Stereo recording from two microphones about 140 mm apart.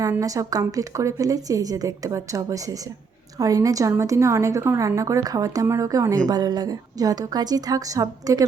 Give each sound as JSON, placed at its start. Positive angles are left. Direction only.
{"t": 0.2, "sound": "a woman's voice", "side_deg": -25}